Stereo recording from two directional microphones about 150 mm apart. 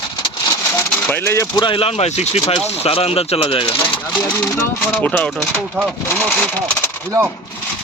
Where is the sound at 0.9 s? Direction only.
10° left (ahead or behind).